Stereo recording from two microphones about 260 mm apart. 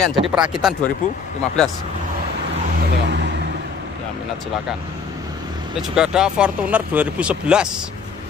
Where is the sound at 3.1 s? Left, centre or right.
Right.